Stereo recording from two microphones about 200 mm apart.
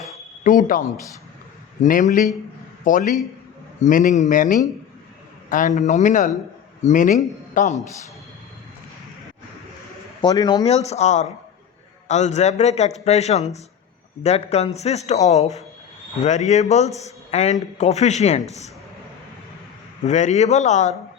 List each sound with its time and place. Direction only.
0.4 s a man's voice: 40° left (ahead or behind)
10.2 s speech: 20° left (ahead or behind)
10.7 s a man's voice: 35° left (ahead or behind)
20.1 s a man's voice: 35° left (ahead or behind)